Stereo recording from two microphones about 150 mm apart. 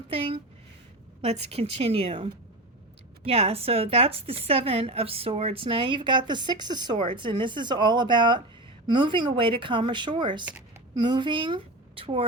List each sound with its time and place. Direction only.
0.1 s a woman's voice: 35° right (ahead or behind)